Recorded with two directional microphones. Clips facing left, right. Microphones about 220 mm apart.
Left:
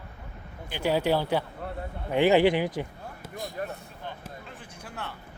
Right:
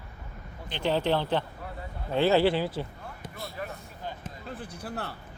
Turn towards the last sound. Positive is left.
turn(degrees=-35)  # may be behind; listen again after turning